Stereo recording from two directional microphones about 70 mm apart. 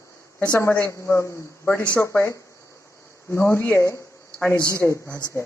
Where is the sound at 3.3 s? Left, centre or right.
Left.